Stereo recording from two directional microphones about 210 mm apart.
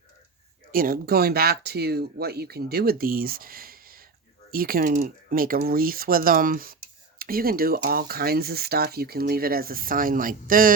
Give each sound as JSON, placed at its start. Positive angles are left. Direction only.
{"t": 0.7, "sound": "speech", "side_deg": -45}